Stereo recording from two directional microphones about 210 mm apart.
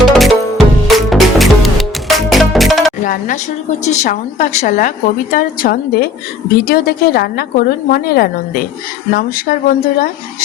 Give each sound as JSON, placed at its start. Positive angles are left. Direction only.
{"t": 0.0, "sound": "music", "side_deg": 0}
{"t": 3.0, "sound": "a sound", "side_deg": 40}
{"t": 3.8, "sound": "a woman's voice", "side_deg": 35}